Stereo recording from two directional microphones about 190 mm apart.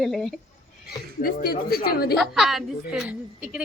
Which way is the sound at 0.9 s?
55° left (ahead or behind).